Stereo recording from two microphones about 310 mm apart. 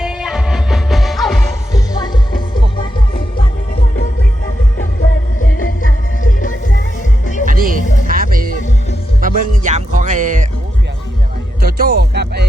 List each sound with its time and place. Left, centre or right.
0.0 s music: centre
1.7 s music: centre
5.5 s music: left
7.4 s music: right
11.6 s music: right